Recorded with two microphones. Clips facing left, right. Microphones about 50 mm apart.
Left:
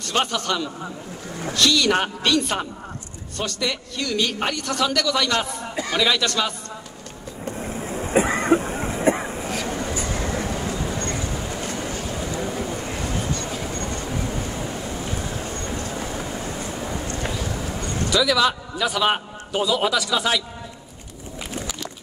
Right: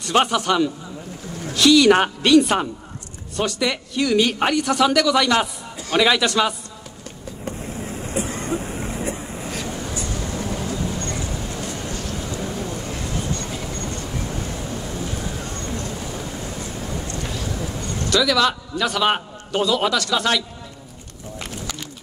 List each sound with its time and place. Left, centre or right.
0.0 s a man's voice: centre
8.1 s a sound: left
8.5 s vehicle: left
8.9 s vehicle: left
9.8 s vehicle: left
10.1 s vehicle: left
10.5 s vehicle: centre
10.9 s vehicle: left
14.2 s vehicle: centre
18.1 s a man's voice: centre